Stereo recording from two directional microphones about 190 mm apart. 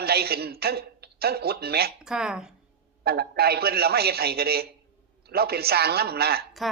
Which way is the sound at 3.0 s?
55° right (ahead or behind).